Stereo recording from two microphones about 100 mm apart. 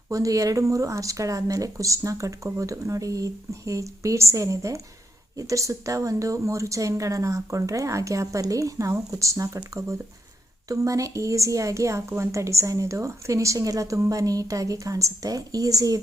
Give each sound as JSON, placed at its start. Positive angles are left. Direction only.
{"t": 0.1, "sound": "a woman's voice", "side_deg": -35}
{"t": 10.7, "sound": "a woman's voice", "side_deg": -35}